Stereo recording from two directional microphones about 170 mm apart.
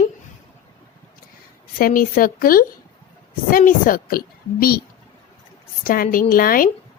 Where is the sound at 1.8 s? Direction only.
55° left (ahead or behind).